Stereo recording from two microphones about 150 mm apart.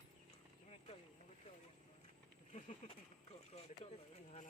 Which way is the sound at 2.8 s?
45° left (ahead or behind).